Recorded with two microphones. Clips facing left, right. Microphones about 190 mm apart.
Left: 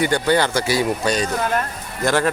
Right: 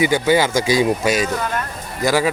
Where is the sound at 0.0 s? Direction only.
10° right (ahead or behind).